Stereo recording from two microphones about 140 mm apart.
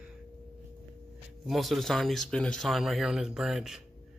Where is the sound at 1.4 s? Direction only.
Centre (ahead or behind).